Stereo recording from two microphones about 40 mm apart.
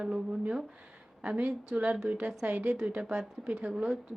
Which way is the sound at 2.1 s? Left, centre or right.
Right.